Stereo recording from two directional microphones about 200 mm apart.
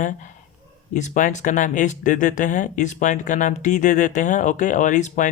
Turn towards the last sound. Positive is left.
turn(degrees=40)  # may be behind; listen again after turning